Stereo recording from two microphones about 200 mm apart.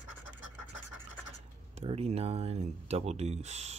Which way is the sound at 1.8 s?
30° right (ahead or behind).